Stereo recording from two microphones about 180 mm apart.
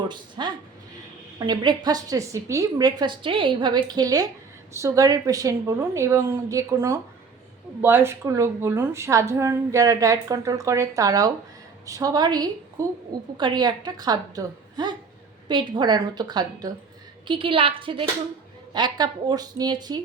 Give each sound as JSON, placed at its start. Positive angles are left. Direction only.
{"t": 0.1, "sound": "a woman's voice", "side_deg": -25}